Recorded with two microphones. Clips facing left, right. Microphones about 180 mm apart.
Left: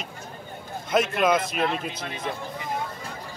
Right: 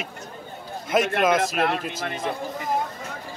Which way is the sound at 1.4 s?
55° right (ahead or behind).